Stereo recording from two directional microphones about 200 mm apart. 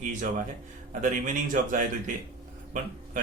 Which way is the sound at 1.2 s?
40° right (ahead or behind).